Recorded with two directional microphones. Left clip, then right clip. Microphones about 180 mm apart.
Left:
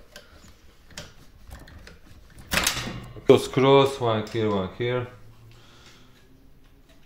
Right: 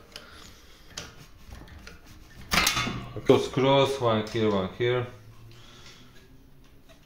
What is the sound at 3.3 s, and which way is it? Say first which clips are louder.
Speech: left 4 dB; 55° left (ahead or behind).